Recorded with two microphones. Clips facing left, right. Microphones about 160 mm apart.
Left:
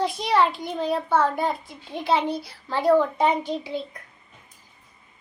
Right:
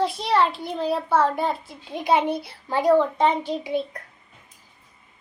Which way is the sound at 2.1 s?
20° right (ahead or behind).